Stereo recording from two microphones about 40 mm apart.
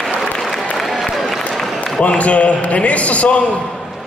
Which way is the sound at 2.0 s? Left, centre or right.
Left.